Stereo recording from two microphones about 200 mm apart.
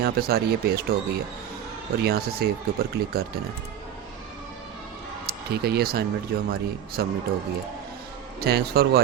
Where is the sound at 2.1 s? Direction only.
50° right (ahead or behind).